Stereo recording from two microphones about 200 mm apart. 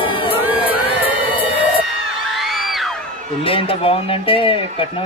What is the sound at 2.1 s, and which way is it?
Music, centre (ahead or behind).